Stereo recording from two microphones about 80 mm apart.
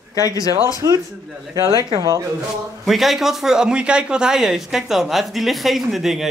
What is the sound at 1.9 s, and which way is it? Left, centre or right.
Speech, right.